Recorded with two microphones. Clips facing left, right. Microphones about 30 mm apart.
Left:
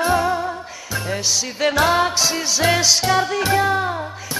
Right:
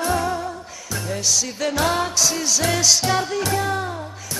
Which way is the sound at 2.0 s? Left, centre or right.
Left.